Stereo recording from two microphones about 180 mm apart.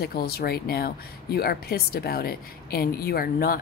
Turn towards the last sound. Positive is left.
turn(degrees=55)  # may be behind; listen again after turning